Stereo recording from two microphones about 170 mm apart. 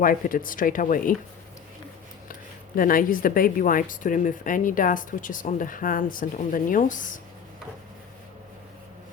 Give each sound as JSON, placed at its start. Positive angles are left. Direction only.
{"t": 0.0, "sound": "speech", "side_deg": 55}
{"t": 2.7, "sound": "speech", "side_deg": 55}